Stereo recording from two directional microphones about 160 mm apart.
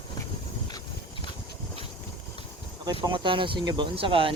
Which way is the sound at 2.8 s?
30° right (ahead or behind).